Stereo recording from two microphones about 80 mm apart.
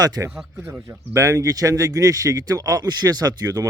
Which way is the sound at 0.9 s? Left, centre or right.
Right.